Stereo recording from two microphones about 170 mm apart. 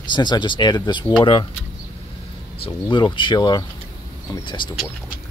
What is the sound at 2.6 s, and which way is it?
Speech, 25° left (ahead or behind).